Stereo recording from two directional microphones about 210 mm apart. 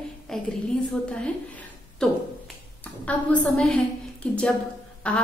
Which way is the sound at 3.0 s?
5° left (ahead or behind).